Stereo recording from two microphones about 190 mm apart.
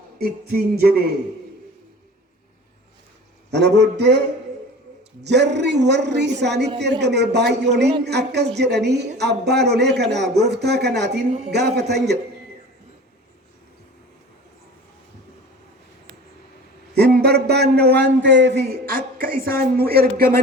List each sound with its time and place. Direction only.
0.2 s a man's voice: 55° right (ahead or behind)
3.5 s a man's voice: 65° right (ahead or behind)
5.2 s a man's voice: 65° right (ahead or behind)
16.9 s a man's voice: 60° right (ahead or behind)